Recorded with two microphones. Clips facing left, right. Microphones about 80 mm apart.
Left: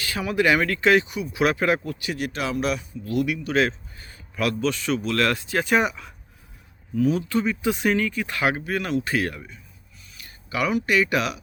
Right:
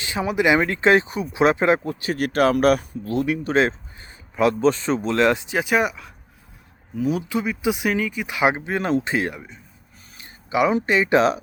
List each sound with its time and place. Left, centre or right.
0.0 s speech: right
2.1 s speech: right
3.1 s a man's voice: right; by 5.7 s centre
5.7 s speech: centre; by 11.3 s right